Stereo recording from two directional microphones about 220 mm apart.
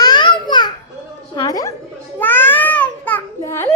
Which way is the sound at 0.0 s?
20° left (ahead or behind).